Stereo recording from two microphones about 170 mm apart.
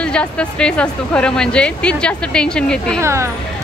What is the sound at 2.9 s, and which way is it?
Speech, 15° right (ahead or behind).